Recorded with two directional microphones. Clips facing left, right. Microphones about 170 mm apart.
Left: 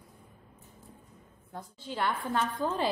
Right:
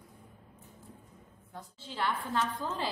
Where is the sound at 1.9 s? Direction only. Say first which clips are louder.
Left 2 dB; 55° left (ahead or behind).